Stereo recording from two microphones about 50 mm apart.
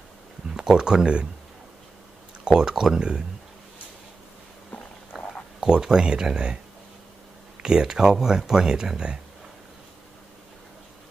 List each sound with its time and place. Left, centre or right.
0.6 s speech: centre
2.4 s speech: centre
5.1 s a sound: centre
5.7 s speech: centre
7.6 s speech: centre